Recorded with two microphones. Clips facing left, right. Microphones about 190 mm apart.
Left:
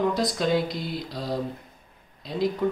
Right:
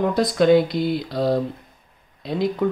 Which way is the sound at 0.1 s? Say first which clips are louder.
Right 7 dB; 55° right (ahead or behind).